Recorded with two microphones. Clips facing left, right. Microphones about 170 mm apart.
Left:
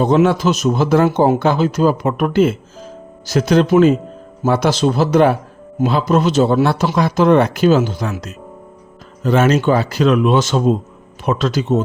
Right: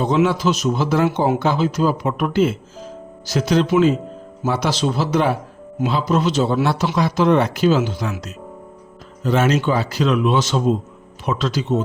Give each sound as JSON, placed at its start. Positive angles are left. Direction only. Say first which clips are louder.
{"t": 0.0, "sound": "speech", "louder": "left 4 dB", "side_deg": 50}